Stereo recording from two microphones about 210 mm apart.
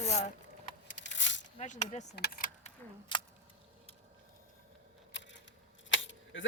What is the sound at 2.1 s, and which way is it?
Keys jangling, 50° left (ahead or behind).